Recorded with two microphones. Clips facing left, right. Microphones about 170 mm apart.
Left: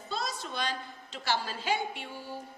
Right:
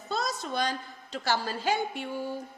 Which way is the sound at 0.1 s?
45° right (ahead or behind).